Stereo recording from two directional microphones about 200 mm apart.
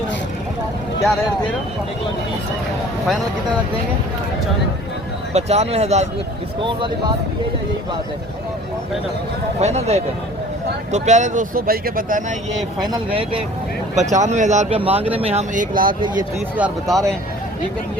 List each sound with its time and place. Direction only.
1.0 s speech: 5° left (ahead or behind)
5.3 s speech: 35° right (ahead or behind)
9.6 s speech: 35° right (ahead or behind)
12.8 s speech: 25° right (ahead or behind)
13.9 s speech: 35° right (ahead or behind)
15.9 s speech: 25° right (ahead or behind)
16.6 s speech: 5° right (ahead or behind)